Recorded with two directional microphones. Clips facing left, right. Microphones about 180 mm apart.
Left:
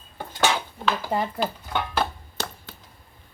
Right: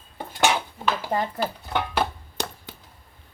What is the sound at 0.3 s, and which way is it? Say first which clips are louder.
Dishes: right 1 dB; 10° right (ahead or behind).